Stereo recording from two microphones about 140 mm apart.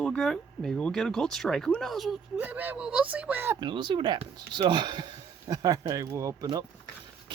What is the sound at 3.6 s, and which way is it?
Speech, 35° right (ahead or behind).